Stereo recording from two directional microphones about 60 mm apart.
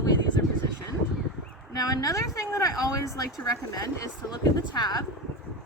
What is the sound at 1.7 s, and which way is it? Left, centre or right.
Speech, left.